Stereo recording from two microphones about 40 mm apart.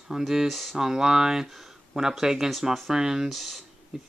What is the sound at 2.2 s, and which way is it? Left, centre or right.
Speech, centre.